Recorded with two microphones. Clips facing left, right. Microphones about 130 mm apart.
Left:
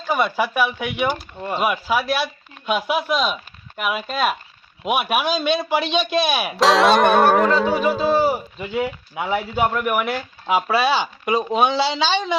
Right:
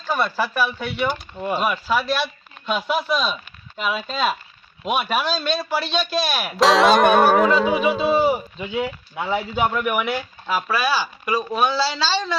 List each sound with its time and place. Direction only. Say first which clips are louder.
0.1 s speech: left 2 dB; 15° left (ahead or behind)
1.4 s music: right 1 dB; 5° right (ahead or behind)
1.6 s speech: left 3 dB; 10° left (ahead or behind)
6.6 s music: even; centre (ahead or behind)
10.4 s speech: left 5 dB; 25° left (ahead or behind)